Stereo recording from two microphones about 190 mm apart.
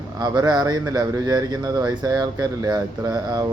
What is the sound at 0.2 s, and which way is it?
A man's voice, 20° right (ahead or behind).